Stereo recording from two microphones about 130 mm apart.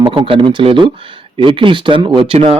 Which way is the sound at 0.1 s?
40° right (ahead or behind).